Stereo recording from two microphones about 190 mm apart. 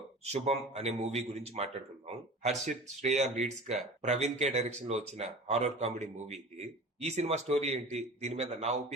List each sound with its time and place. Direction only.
0.3 s a man's voice: 35° right (ahead or behind)